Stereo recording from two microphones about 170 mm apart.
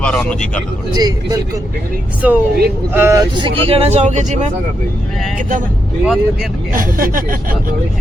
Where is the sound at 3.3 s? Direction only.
30° right (ahead or behind); by 5.6 s 50° right (ahead or behind).